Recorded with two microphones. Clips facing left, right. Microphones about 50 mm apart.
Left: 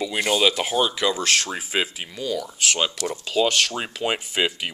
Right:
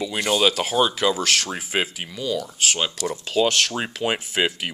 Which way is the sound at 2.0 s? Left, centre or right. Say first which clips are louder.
Right 1 dB; left.